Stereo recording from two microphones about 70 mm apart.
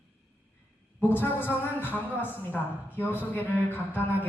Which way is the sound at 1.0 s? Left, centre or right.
Left.